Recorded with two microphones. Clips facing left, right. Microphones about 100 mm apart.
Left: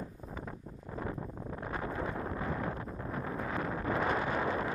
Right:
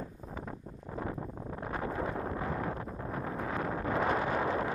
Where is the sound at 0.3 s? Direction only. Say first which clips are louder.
Right 1 dB; 35° right (ahead or behind).